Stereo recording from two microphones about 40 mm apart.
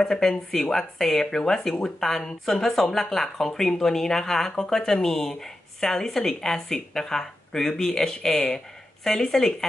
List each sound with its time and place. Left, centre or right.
0.0 s speech: centre